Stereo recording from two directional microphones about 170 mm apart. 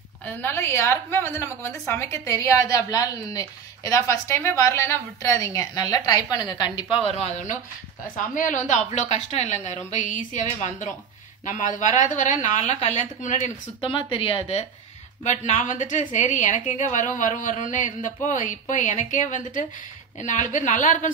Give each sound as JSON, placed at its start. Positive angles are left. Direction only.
{"t": 0.2, "sound": "a woman's voice", "side_deg": 15}
{"t": 13.7, "sound": "a woman's voice", "side_deg": 30}